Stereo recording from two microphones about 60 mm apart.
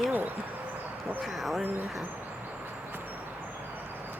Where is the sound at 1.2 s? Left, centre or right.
Centre.